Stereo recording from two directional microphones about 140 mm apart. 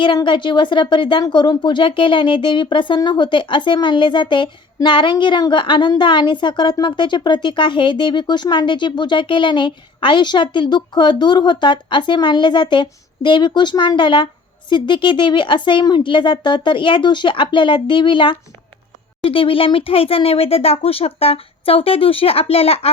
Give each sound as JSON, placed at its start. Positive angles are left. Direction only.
{"t": 0.0, "sound": "speech", "side_deg": 35}